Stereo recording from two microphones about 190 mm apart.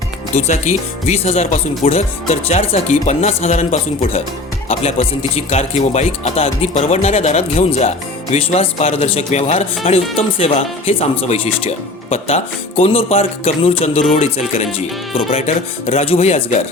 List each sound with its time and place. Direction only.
0.3 s speech: 40° left (ahead or behind)